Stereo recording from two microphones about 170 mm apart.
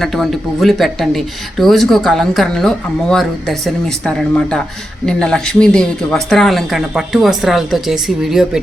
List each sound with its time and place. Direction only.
0.0 s speech: centre (ahead or behind)